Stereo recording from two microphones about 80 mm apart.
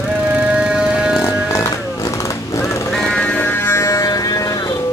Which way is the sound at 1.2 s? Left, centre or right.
Left.